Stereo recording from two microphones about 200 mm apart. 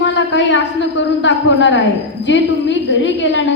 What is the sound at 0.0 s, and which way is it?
A woman's voice, 65° left (ahead or behind).